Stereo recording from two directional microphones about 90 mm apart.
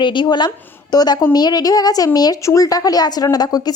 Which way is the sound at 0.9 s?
50° left (ahead or behind).